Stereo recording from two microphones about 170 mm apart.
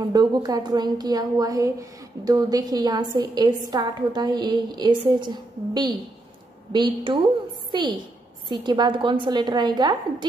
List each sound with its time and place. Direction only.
0.1 s a woman's voice: 25° right (ahead or behind)